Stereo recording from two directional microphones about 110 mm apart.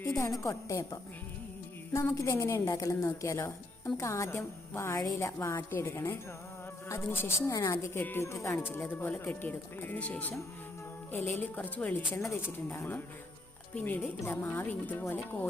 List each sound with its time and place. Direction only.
0.2 s a woman's voice: 30° left (ahead or behind)
7.9 s a woman's voice: 20° left (ahead or behind)